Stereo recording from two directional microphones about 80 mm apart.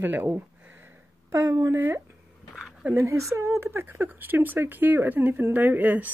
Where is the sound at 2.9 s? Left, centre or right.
Right.